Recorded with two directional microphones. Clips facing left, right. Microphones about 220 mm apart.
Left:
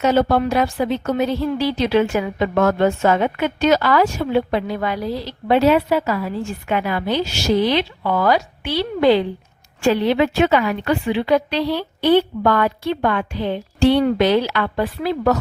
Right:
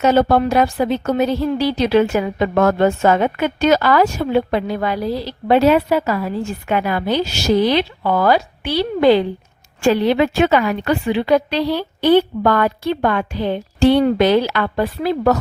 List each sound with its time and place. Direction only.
0.0 s a woman's voice: 45° right (ahead or behind)